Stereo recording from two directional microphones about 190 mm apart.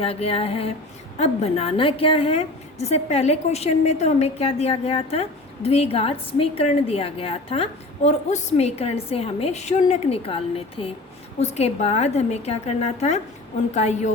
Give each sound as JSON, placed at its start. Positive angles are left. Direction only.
{"t": 0.0, "sound": "a woman's voice", "side_deg": 30}